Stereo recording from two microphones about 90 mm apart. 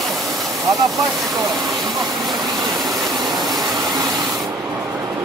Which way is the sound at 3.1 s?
50° right (ahead or behind).